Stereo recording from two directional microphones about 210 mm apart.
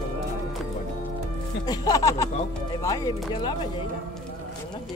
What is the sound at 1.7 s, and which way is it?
Speech, 15° left (ahead or behind).